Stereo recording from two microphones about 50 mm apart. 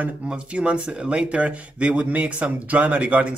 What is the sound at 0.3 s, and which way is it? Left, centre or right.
Speech, right.